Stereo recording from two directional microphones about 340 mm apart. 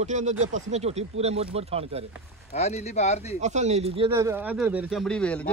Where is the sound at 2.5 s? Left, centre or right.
Centre.